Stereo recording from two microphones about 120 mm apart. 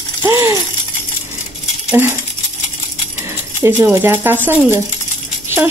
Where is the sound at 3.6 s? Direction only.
20° right (ahead or behind).